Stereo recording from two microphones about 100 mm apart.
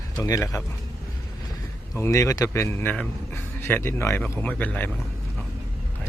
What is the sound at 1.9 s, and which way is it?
Speech, 25° left (ahead or behind).